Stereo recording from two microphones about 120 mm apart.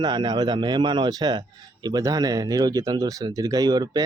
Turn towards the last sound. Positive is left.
turn(degrees=-30)  # may be behind; listen again after turning